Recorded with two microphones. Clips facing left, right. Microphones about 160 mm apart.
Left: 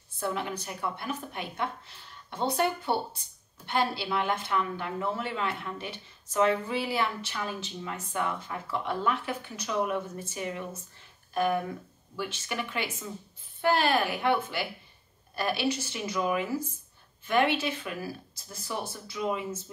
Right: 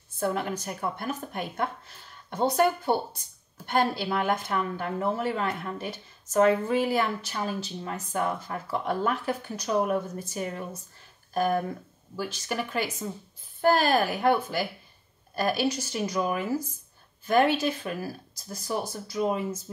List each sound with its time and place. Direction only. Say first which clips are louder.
0.2 s a woman's voice: right 4 dB; 45° right (ahead or behind)